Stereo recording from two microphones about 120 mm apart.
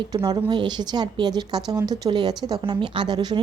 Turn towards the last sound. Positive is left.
turn(degrees=-35)  # may be behind; listen again after turning